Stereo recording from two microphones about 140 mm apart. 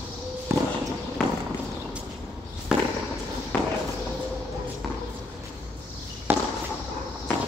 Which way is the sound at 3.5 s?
10° left (ahead or behind).